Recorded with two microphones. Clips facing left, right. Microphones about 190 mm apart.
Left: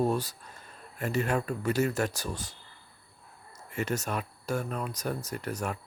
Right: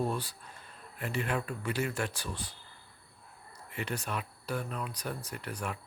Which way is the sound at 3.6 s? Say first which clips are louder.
Left 6 dB; 45° left (ahead or behind).